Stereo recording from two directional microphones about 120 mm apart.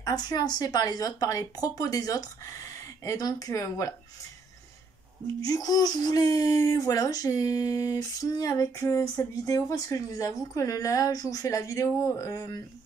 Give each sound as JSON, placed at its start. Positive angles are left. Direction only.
{"t": 0.0, "sound": "speech", "side_deg": 35}
{"t": 5.4, "sound": "speech", "side_deg": 30}